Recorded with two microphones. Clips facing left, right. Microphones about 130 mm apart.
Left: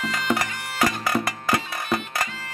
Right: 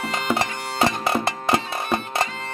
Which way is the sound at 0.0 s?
30° right (ahead or behind).